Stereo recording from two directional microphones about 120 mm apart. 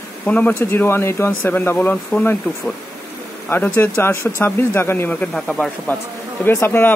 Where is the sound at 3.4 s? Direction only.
15° left (ahead or behind).